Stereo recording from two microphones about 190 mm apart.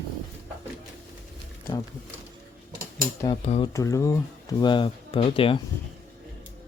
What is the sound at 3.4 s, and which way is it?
Speech, 35° left (ahead or behind).